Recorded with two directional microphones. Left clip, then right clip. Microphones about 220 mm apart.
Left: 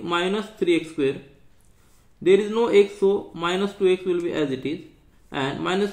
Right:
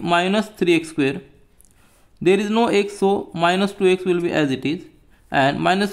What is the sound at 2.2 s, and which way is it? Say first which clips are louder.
Speech: right 1 dB; 50° right (ahead or behind).